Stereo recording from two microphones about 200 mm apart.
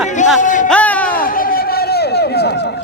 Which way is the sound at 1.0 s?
45° left (ahead or behind).